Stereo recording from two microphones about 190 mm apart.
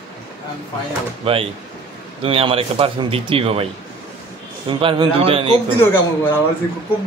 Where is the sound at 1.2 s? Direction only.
30° right (ahead or behind).